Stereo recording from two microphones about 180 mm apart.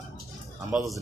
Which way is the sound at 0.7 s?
Centre (ahead or behind).